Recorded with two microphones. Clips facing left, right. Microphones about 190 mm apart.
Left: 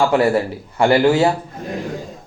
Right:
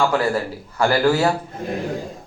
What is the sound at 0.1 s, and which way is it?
A man's voice, 25° left (ahead or behind).